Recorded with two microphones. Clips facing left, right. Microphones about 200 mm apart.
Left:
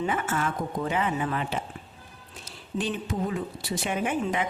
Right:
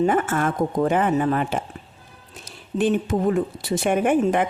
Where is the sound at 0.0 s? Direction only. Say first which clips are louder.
Right 8 dB; 50° right (ahead or behind).